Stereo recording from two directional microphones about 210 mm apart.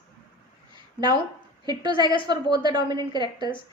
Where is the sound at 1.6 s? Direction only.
20° right (ahead or behind).